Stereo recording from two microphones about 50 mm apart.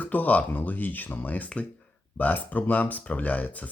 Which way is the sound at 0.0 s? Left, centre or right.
Left.